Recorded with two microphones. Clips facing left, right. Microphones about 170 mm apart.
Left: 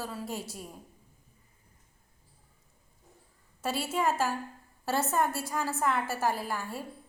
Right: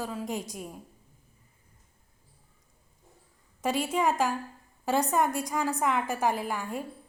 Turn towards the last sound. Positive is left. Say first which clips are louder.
# right 3 dB
turn(degrees=-15)  # may be behind; listen again after turning